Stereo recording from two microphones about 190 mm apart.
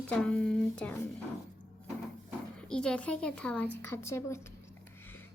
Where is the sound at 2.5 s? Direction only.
5° left (ahead or behind).